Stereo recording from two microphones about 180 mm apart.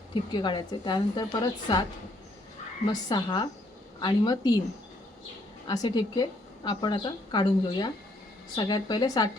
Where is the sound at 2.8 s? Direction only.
25° left (ahead or behind).